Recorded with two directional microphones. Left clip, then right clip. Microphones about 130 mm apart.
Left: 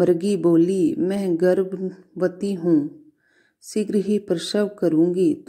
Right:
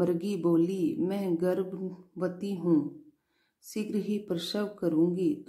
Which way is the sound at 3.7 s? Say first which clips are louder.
Left 11 dB; 30° left (ahead or behind).